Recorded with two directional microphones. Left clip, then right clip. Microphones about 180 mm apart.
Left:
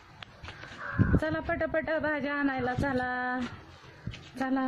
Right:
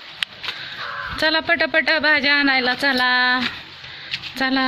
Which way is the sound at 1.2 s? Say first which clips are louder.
Right 13 dB; 25° right (ahead or behind).